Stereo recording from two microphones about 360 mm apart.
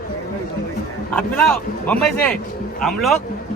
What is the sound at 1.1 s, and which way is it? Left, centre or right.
Speech, centre.